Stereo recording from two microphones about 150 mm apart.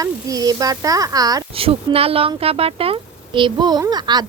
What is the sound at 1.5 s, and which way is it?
A child's voice, 40° right (ahead or behind).